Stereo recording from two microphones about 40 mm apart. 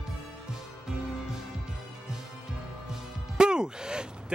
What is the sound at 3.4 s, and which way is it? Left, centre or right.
Speech, centre.